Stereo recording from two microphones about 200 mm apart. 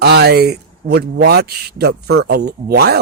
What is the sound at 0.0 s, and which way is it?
Speech, 55° right (ahead or behind).